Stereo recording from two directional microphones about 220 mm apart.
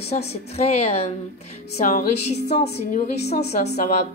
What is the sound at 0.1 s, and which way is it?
A woman's voice, 30° left (ahead or behind).